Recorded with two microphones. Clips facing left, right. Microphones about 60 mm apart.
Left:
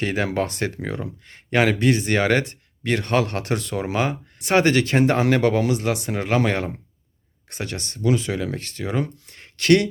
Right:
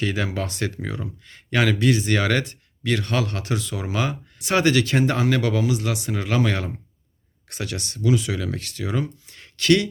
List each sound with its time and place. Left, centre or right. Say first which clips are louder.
0.0 s speech: left 3 dB; left
3.9 s speech: even; left
9.2 s a sound: even; left